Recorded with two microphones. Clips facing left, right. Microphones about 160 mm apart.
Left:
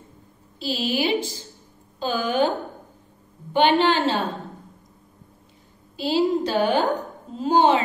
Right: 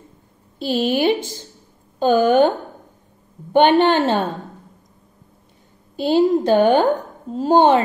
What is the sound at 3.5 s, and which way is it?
Speech, 50° right (ahead or behind).